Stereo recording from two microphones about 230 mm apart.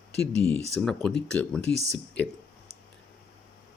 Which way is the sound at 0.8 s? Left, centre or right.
Centre.